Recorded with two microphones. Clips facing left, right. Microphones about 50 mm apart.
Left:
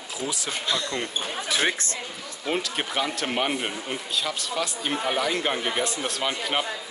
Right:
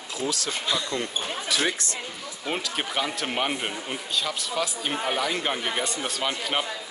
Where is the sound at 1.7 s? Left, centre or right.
Left.